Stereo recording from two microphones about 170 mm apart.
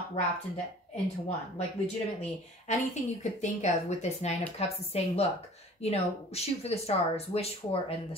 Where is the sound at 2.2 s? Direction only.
40° left (ahead or behind).